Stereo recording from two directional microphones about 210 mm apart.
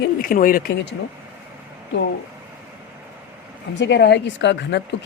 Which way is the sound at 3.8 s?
50° left (ahead or behind).